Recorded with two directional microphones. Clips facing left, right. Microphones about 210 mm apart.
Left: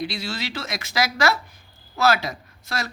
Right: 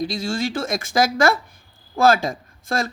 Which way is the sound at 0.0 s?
45° right (ahead or behind).